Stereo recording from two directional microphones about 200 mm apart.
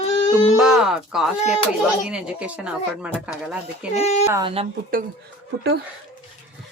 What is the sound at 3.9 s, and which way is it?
Speech, 35° left (ahead or behind).